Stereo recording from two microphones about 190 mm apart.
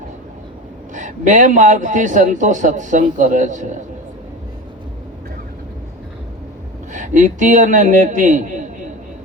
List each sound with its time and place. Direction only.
0.9 s a man's voice: 40° right (ahead or behind)
6.9 s a man's voice: 40° right (ahead or behind)